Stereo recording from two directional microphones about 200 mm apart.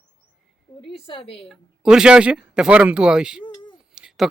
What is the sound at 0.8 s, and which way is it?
Speech, 25° left (ahead or behind).